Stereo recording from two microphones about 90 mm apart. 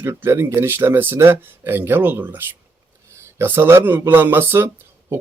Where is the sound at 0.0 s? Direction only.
30° right (ahead or behind).